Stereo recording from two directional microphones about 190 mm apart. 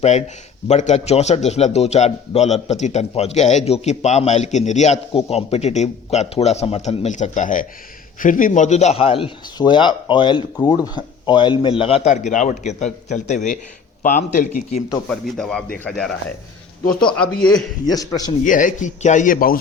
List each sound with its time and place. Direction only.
0.0 s a man's voice: 35° left (ahead or behind)
15.1 s speech: 5° left (ahead or behind)
17.8 s a man's voice: 20° left (ahead or behind)
18.4 s speech: 45° left (ahead or behind)